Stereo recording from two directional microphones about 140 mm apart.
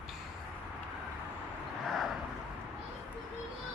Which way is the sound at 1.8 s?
Centre (ahead or behind).